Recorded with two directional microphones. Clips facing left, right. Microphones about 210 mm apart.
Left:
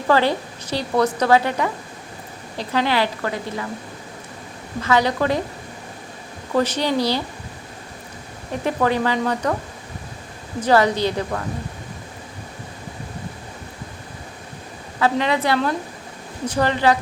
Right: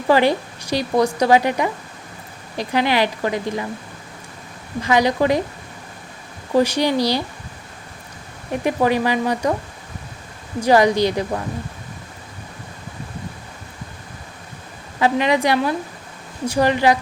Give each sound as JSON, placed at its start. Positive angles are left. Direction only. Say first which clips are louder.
{"t": 0.1, "sound": "speech", "louder": "right 2 dB", "side_deg": -15}
{"t": 4.8, "sound": "speech", "louder": "right 2 dB", "side_deg": -15}
{"t": 6.6, "sound": "speech", "louder": "right 3 dB", "side_deg": -10}
{"t": 8.6, "sound": "speech", "louder": "right 2 dB", "side_deg": -15}
{"t": 10.6, "sound": "speech", "louder": "right 2 dB", "side_deg": -15}
{"t": 14.9, "sound": "speech", "louder": "right 2 dB", "side_deg": -15}